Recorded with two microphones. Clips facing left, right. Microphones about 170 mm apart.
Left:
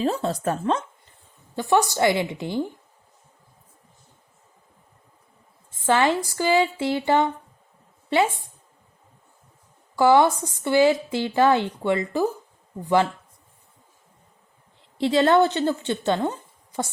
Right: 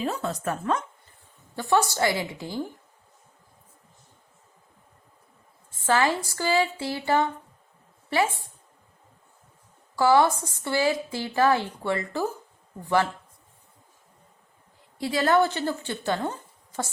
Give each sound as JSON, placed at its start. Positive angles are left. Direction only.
{"t": 0.0, "sound": "a woman's voice", "side_deg": 30}
{"t": 5.7, "sound": "a woman's voice", "side_deg": 20}
{"t": 9.9, "sound": "a woman's voice", "side_deg": 20}
{"t": 15.0, "sound": "a woman's voice", "side_deg": 25}